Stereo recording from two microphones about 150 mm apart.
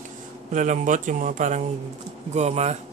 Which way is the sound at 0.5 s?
55° right (ahead or behind).